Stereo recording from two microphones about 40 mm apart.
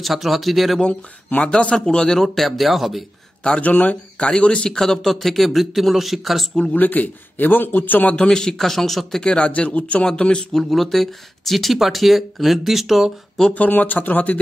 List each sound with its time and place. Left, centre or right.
0.0 s speech: centre
1.4 s speech: left; by 3.1 s centre
3.4 s speech: left
4.3 s speech: left
4.6 s speech: centre
6.7 s a man's voice: left
8.2 s speech: centre
9.2 s speech: left
10.0 s speech: centre
10.6 s speech: centre
13.7 s a man's voice: left